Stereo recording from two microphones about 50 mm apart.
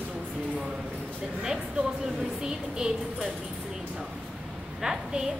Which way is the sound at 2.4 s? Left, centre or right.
Centre.